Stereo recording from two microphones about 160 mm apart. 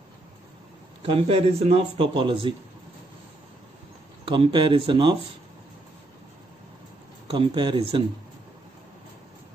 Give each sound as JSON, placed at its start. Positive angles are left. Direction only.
{"t": 1.0, "sound": "speech", "side_deg": -35}
{"t": 4.3, "sound": "speech", "side_deg": -30}
{"t": 7.2, "sound": "speech", "side_deg": -30}